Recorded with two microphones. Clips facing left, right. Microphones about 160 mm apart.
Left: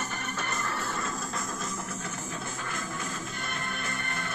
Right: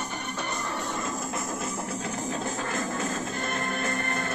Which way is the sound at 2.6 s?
45° right (ahead or behind).